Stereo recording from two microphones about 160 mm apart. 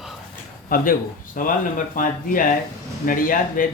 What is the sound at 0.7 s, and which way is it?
Speech, 65° left (ahead or behind).